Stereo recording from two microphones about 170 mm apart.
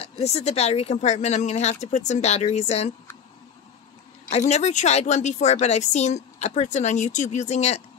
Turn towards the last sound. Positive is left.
turn(degrees=40)  # may be behind; listen again after turning